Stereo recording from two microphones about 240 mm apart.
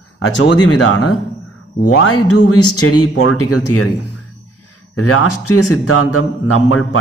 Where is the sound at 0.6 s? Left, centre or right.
Left.